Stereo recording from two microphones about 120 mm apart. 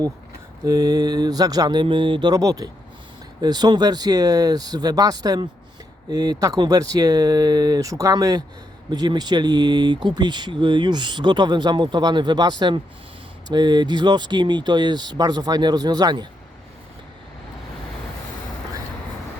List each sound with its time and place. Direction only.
0.6 s speech: 30° right (ahead or behind)